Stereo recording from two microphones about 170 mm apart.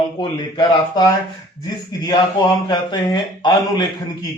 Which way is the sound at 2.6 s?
25° left (ahead or behind).